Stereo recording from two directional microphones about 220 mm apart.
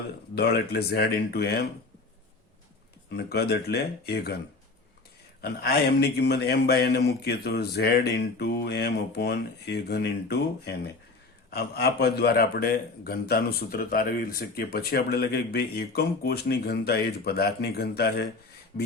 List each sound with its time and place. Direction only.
0.3 s a man's voice: 45° left (ahead or behind)
3.1 s a man's voice: 45° left (ahead or behind)
5.4 s a man's voice: 45° left (ahead or behind)